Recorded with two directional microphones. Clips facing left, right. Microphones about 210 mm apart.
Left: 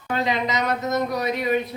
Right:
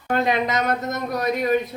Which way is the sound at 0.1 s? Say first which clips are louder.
Right 3 dB; 50° right (ahead or behind).